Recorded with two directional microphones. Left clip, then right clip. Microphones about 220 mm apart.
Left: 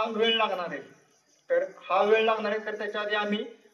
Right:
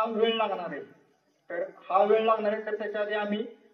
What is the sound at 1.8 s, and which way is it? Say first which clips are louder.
Speech: right 2 dB; 55° left (ahead or behind).